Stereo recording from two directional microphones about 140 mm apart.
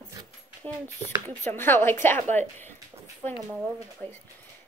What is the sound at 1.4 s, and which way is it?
A woman's voice, 15° left (ahead or behind).